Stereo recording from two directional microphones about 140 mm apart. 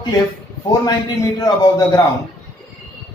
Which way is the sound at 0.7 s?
25° left (ahead or behind).